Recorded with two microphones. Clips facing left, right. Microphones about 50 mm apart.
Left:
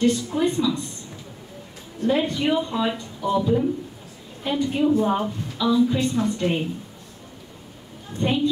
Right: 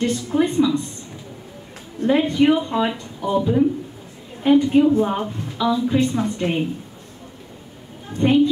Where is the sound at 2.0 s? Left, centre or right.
Right.